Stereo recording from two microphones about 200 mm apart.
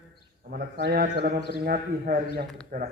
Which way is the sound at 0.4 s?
50° right (ahead or behind).